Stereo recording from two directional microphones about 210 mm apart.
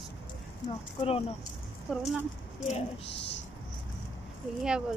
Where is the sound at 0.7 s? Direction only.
25° left (ahead or behind).